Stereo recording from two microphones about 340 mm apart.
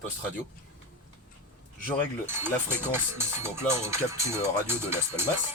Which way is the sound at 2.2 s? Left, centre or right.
Centre.